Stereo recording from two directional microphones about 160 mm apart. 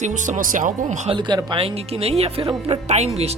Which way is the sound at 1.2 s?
30° right (ahead or behind).